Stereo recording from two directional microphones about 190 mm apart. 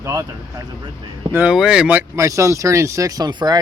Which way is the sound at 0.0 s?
15° right (ahead or behind).